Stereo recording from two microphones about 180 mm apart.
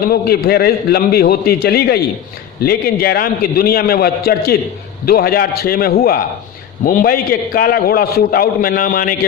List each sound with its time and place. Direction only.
0.0 s a man's voice: 60° left (ahead or behind)